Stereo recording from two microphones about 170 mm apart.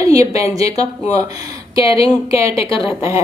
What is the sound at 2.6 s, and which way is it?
Speech, 30° left (ahead or behind).